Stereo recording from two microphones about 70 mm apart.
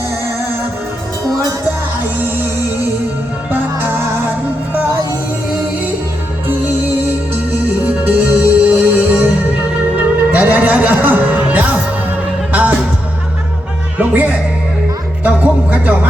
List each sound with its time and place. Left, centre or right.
3.5 s music: right
8.0 s music: right
14.0 s music: right